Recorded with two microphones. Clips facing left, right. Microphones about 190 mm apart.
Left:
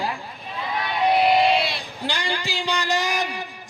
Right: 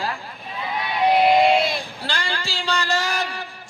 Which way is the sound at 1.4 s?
50° right (ahead or behind).